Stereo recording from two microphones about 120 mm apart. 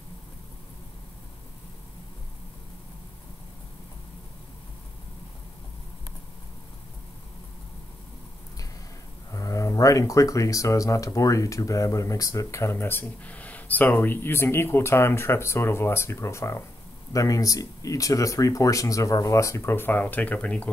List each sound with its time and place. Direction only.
9.3 s speech: 30° left (ahead or behind); by 20.7 s 10° left (ahead or behind)